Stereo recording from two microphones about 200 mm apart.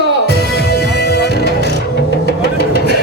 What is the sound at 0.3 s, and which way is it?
Music, 55° left (ahead or behind).